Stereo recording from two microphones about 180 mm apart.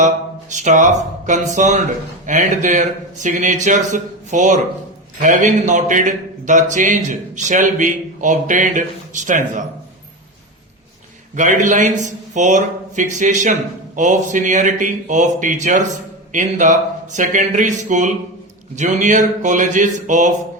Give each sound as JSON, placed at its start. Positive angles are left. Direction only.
{"t": 0.5, "sound": "a man's voice", "side_deg": -45}
{"t": 11.3, "sound": "a man's voice", "side_deg": -45}